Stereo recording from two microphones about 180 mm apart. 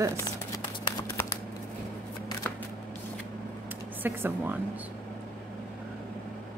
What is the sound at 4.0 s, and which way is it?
Speech, 10° right (ahead or behind).